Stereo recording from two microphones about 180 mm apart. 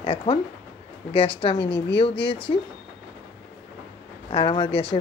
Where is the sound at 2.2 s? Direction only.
30° left (ahead or behind).